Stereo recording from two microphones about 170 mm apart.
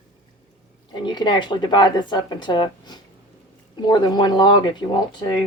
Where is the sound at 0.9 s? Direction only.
25° left (ahead or behind).